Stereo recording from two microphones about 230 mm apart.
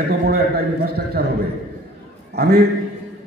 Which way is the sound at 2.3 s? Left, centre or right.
Right.